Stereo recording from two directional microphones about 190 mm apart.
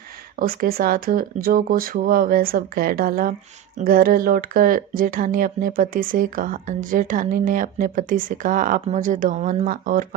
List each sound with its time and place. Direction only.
0.3 s speech: 50° right (ahead or behind)